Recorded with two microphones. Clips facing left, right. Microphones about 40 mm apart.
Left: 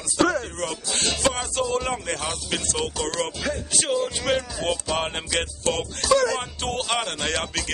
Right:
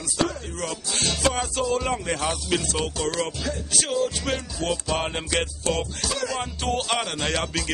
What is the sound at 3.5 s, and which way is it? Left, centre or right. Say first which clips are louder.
Music: left 2 dB; centre.